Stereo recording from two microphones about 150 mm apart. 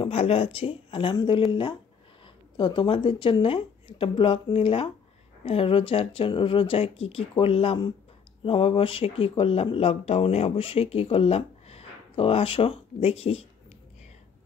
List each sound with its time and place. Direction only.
0.0 s speech: 40° left (ahead or behind)